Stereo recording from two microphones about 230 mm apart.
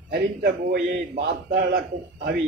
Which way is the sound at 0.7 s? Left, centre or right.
Right.